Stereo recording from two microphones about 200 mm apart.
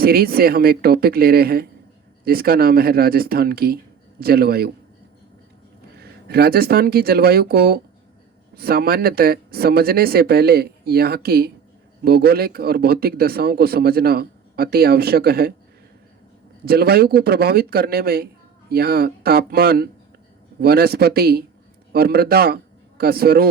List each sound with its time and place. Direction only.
0.0 s speech: 50° right (ahead or behind)
6.0 s speech: 50° right (ahead or behind)
16.6 s a man's voice: 50° right (ahead or behind)